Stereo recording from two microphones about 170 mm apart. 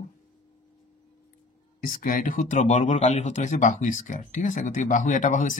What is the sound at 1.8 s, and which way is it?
Speech, 55° left (ahead or behind).